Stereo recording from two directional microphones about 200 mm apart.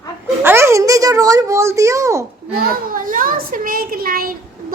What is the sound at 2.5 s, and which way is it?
A child's voice, 45° right (ahead or behind).